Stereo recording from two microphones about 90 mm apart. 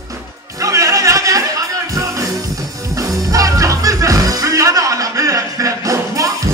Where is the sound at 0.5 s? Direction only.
35° right (ahead or behind).